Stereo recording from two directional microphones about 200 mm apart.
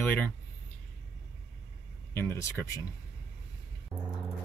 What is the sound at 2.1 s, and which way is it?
Speech, 10° left (ahead or behind).